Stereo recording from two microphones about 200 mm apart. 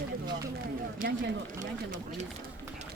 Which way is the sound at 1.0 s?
40° right (ahead or behind).